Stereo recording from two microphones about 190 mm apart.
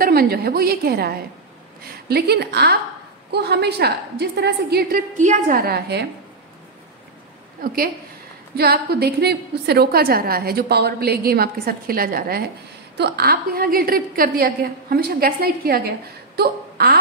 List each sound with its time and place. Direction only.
0.0 s a woman's voice: 55° right (ahead or behind)
7.6 s a woman's voice: 50° right (ahead or behind)
16.3 s a sound: 55° right (ahead or behind)